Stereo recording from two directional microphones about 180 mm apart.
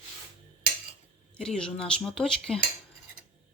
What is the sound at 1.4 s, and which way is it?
Speech, 5° left (ahead or behind).